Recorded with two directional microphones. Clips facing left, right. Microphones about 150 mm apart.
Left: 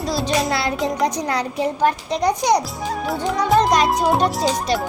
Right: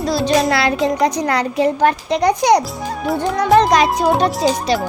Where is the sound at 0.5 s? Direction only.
85° right.